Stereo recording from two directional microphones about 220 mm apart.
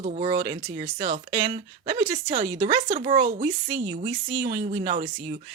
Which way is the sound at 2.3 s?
40° right (ahead or behind).